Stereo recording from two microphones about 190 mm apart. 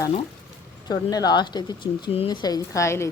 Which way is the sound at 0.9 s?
20° left (ahead or behind).